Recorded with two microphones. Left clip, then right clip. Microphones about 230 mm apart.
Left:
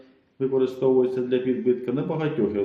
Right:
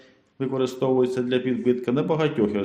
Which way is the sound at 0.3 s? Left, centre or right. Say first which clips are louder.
Left 2 dB; right.